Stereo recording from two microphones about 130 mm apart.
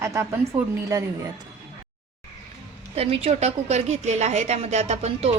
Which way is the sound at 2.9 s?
50° right (ahead or behind).